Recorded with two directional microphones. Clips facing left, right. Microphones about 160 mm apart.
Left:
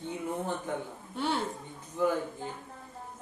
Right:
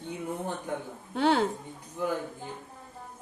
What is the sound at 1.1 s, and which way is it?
Speech, 90° right.